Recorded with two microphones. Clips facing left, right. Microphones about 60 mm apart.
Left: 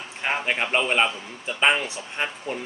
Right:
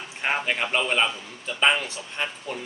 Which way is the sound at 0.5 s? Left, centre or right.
Centre.